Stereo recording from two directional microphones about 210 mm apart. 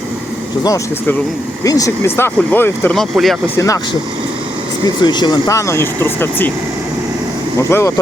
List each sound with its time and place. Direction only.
0.6 s speech: 15° left (ahead or behind)
4.9 s speech: 20° left (ahead or behind)
7.6 s speech: 15° left (ahead or behind)